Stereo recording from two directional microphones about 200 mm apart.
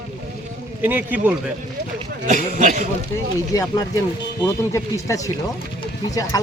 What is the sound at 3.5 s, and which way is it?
Speech, 15° left (ahead or behind).